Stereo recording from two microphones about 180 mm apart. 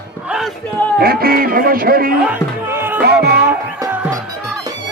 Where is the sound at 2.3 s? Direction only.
10° right (ahead or behind).